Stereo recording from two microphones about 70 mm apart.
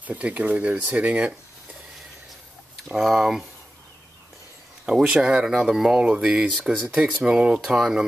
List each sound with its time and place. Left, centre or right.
0.0 s speech: right
3.0 s speech: centre
4.8 s speech: centre